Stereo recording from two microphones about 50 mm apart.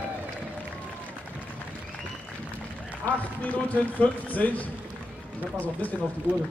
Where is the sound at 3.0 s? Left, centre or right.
Left.